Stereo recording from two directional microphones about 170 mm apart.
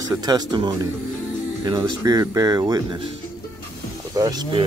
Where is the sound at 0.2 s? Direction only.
25° right (ahead or behind).